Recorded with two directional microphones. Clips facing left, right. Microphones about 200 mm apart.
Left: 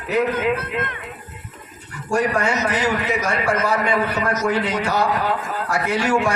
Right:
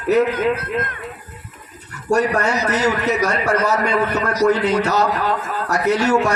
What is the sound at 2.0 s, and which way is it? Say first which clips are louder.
A man's voice: right 2 dB; 40° right (ahead or behind).